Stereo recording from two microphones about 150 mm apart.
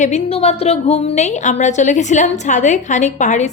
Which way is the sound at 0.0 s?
45° left (ahead or behind).